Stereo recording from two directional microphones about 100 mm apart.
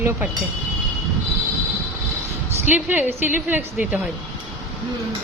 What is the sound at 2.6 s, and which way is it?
A woman's voice, 15° right (ahead or behind).